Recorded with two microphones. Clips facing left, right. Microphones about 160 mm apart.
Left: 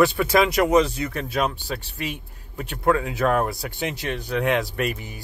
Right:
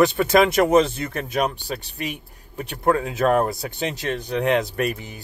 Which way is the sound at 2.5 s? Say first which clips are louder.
Right 1 dB; 30° right (ahead or behind).